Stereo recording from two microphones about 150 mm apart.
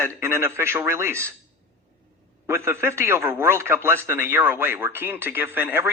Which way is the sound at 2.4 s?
15° right (ahead or behind).